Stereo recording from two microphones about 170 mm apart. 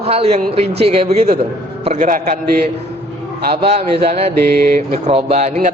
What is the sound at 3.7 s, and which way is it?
Mantra, 40° right (ahead or behind).